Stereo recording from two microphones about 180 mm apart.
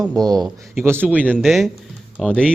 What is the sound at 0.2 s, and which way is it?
Speech, 20° right (ahead or behind).